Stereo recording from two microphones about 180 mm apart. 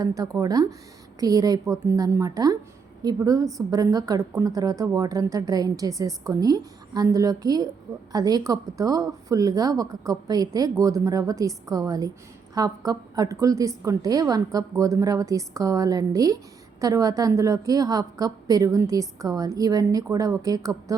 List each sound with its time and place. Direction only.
0.0 s a woman's voice: 20° right (ahead or behind)